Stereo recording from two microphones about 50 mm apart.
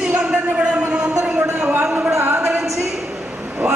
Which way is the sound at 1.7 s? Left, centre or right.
Right.